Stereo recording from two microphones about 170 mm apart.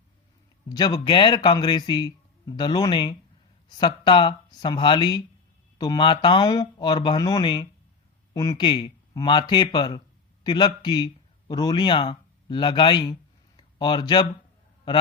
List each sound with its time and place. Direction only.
0.7 s speech: 25° left (ahead or behind)